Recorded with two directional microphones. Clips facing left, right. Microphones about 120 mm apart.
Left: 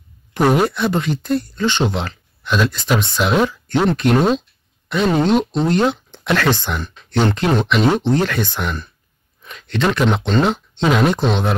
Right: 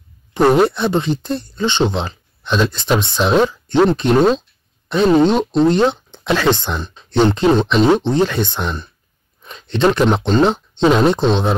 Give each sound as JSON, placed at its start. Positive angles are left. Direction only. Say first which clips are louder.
{"t": 0.5, "sound": "speech", "louder": "right 3 dB", "side_deg": -25}